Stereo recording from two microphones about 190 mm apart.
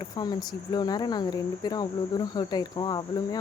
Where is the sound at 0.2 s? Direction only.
20° left (ahead or behind).